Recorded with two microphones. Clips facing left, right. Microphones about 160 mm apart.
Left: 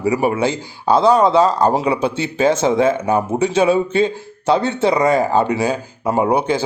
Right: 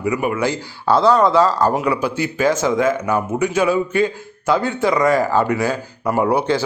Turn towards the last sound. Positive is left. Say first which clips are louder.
# left 1 dB
turn(degrees=20)  # may be behind; listen again after turning